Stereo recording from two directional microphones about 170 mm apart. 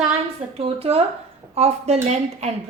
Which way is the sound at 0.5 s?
35° right (ahead or behind).